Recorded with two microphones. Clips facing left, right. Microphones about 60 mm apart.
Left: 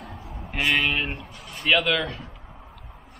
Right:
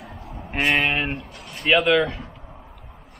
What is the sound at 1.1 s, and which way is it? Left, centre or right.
Speech, centre.